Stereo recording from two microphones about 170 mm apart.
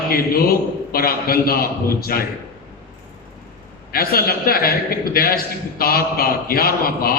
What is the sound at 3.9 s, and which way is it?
A man's voice, 60° left (ahead or behind).